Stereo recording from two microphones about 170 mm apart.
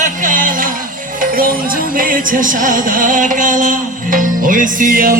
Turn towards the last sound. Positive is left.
turn(degrees=-55)  # may be behind; listen again after turning